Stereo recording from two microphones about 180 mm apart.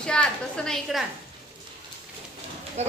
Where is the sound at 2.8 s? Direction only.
40° right (ahead or behind).